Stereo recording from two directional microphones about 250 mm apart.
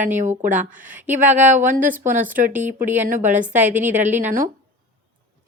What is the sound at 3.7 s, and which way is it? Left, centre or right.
Speech, right.